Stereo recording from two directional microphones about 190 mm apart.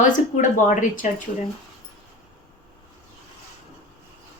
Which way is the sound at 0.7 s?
40° left (ahead or behind).